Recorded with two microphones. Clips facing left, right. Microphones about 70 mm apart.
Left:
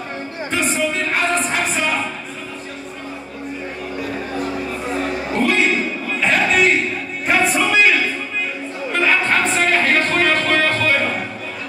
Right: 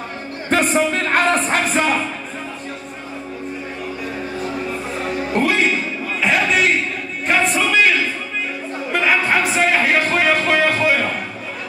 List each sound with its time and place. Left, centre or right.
0.5 s music: right
5.3 s a sound: centre
8.9 s music: centre